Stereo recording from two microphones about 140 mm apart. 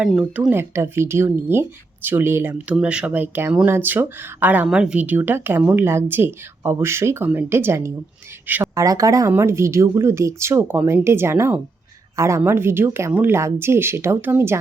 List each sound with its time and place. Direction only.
0.0 s speech: 5° right (ahead or behind)
0.5 s speech: 20° right (ahead or behind)